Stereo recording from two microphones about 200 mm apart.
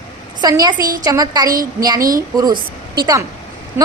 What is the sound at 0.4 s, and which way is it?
A woman's voice, 20° right (ahead or behind).